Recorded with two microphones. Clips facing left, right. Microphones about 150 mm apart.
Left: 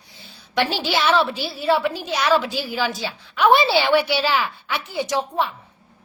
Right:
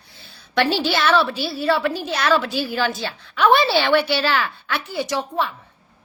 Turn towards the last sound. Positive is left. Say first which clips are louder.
# left 1 dB
turn(degrees=20)  # may be behind; listen again after turning